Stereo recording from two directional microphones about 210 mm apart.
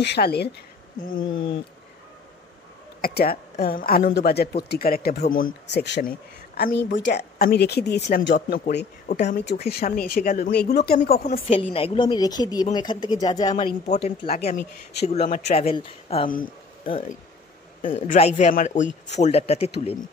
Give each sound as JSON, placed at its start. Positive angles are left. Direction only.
{"t": 0.0, "sound": "speech", "side_deg": 50}
{"t": 1.2, "sound": "a woman's voice", "side_deg": 25}
{"t": 3.0, "sound": "speech", "side_deg": 45}
{"t": 8.4, "sound": "speech", "side_deg": 45}
{"t": 11.4, "sound": "a woman's voice", "side_deg": 25}
{"t": 13.7, "sound": "speech", "side_deg": 45}
{"t": 14.0, "sound": "a woman's voice", "side_deg": 30}
{"t": 18.0, "sound": "a woman's voice", "side_deg": 35}